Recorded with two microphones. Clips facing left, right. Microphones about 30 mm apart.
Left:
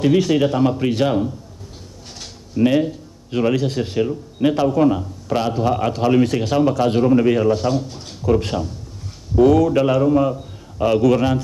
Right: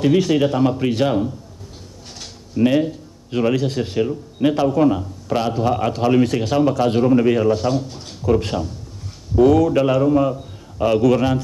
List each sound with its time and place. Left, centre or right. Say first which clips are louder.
0.0 s speech: even; centre
2.0 s a sound: even; right
4.1 s speech: even; centre
5.3 s a man's voice: even; centre